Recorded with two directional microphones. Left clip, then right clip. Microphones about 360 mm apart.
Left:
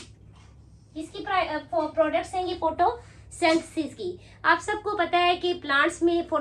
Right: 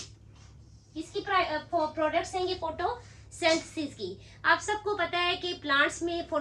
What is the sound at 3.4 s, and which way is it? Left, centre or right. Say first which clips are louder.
A child's voice: left 4 dB; centre.